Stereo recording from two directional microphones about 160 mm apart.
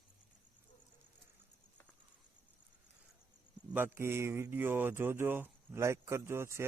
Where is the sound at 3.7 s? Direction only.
15° right (ahead or behind).